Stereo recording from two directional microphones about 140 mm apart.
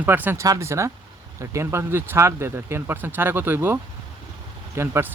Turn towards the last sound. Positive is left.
turn(degrees=-20)  # may be behind; listen again after turning